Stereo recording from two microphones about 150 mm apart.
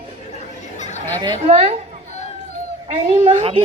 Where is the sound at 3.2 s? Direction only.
55° right (ahead or behind).